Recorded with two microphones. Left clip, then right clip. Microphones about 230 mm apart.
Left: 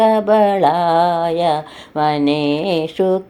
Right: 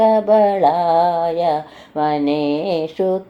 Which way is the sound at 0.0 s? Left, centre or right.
Left.